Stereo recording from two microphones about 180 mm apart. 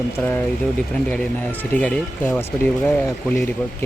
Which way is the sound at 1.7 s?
10° left (ahead or behind).